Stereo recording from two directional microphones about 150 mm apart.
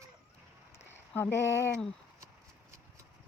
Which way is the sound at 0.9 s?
15° left (ahead or behind).